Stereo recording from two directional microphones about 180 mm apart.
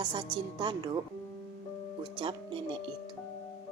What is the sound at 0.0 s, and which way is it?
Music, 25° right (ahead or behind).